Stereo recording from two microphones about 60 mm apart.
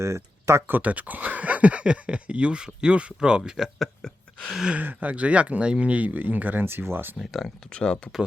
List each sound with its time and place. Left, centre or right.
0.0 s speech: right
0.7 s speech: right
3.8 s a sound: centre
4.7 s speech: right
7.2 s speech: centre
7.7 s speech: centre